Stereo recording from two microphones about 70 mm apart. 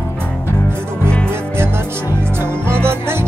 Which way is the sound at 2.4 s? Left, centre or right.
Right.